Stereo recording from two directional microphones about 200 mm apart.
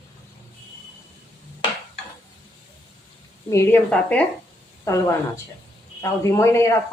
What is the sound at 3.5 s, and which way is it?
Speech, 10° left (ahead or behind).